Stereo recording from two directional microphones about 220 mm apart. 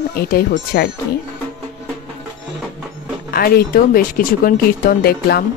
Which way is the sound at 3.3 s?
45° left (ahead or behind).